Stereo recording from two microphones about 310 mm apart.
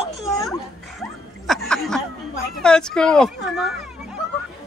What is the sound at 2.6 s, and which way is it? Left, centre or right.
A man's voice, centre.